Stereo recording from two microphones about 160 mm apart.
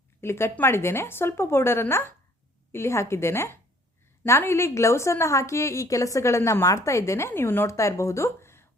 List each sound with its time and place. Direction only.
0.2 s a woman's voice: 15° left (ahead or behind)